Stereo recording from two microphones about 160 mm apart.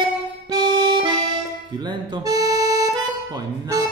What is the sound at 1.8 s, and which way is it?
Speech, 25° right (ahead or behind).